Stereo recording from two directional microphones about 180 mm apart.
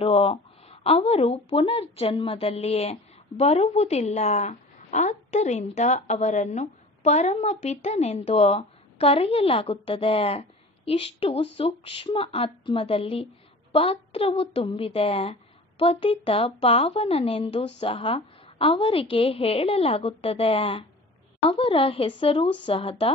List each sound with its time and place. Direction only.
0.0 s speech: 30° left (ahead or behind)